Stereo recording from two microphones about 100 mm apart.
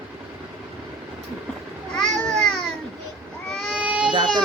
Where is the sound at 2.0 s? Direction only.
5° left (ahead or behind).